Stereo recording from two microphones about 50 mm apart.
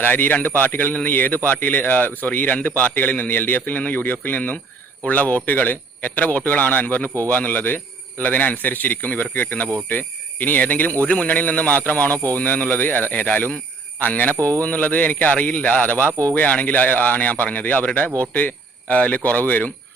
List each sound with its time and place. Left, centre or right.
0.0 s a man's voice: left
11.0 s a man's voice: left
14.3 s speech: right
14.6 s a man's voice: left